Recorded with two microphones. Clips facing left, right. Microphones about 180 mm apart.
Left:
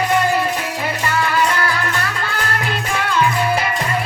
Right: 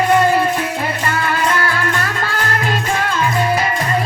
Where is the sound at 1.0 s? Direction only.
45° right (ahead or behind).